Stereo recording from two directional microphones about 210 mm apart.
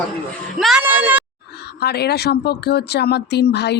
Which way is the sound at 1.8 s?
50° left (ahead or behind).